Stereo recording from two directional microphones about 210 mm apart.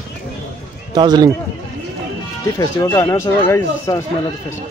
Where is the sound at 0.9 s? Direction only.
20° right (ahead or behind).